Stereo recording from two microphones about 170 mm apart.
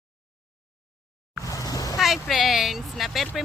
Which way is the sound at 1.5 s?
20° left (ahead or behind).